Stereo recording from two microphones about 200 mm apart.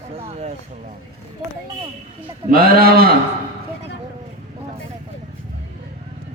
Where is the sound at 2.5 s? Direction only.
50° right (ahead or behind).